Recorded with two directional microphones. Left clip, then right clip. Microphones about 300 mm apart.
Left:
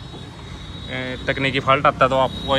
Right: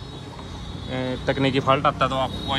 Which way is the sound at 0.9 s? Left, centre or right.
Centre.